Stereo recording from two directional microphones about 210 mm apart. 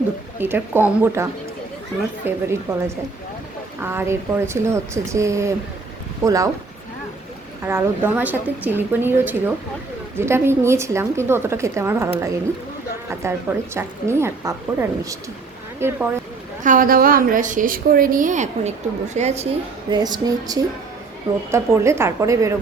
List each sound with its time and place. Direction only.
0.3 s a woman's voice: 10° right (ahead or behind)
7.6 s a woman's voice: 10° right (ahead or behind)
16.6 s a woman's voice: 40° right (ahead or behind)
19.9 s a sound: 20° right (ahead or behind)
21.5 s a woman's voice: 10° right (ahead or behind)